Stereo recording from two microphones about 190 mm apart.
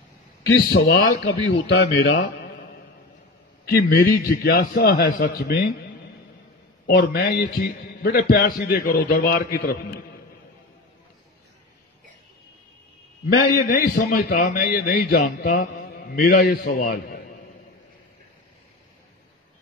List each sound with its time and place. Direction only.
0.4 s a man's voice: 60° left (ahead or behind)
3.7 s a man's voice: 55° left (ahead or behind)
6.9 s a man's voice: 55° left (ahead or behind)
13.5 s a man's voice: 50° left (ahead or behind)